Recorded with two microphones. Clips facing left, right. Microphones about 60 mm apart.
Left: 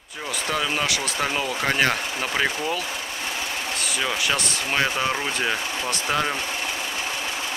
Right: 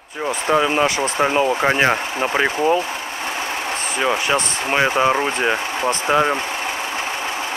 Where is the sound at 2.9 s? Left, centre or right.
Right.